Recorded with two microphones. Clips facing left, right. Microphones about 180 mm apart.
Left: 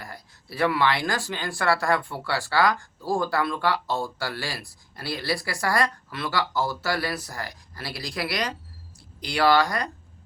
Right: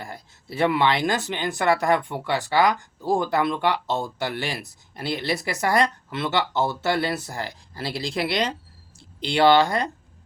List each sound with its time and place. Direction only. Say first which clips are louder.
0.0 s speech: right 4 dB; 25° right (ahead or behind)